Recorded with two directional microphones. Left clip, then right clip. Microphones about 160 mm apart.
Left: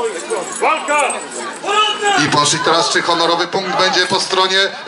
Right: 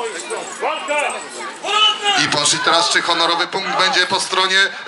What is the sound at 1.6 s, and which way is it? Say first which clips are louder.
A man's voice: left 1 dB; 10° right (ahead or behind).